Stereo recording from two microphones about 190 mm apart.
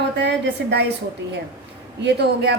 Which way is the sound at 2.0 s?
65° right (ahead or behind).